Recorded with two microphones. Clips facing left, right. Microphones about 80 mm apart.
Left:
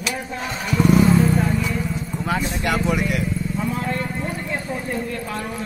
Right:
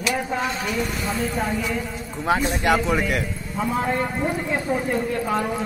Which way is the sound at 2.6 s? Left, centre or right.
Right.